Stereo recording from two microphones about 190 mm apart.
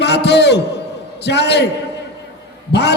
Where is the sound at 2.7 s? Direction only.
60° left (ahead or behind).